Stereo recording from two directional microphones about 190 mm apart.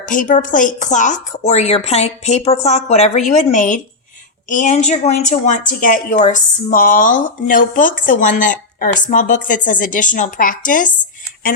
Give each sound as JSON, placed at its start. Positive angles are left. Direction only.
{"t": 0.0, "sound": "a woman's voice", "side_deg": 45}